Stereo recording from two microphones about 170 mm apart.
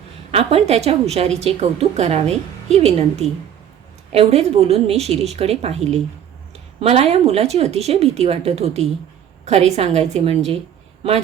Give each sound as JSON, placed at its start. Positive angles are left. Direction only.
{"t": 0.3, "sound": "a woman's voice", "side_deg": -35}